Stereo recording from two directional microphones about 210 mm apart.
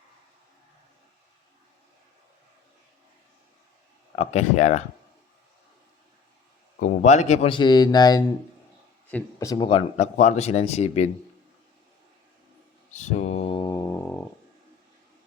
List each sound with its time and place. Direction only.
4.1 s speech: 30° left (ahead or behind)
6.7 s speech: 40° left (ahead or behind)
12.9 s mantra: 35° left (ahead or behind); by 14.3 s 10° left (ahead or behind)